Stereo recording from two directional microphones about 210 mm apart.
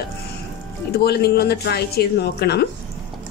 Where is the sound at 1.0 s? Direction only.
50° left (ahead or behind).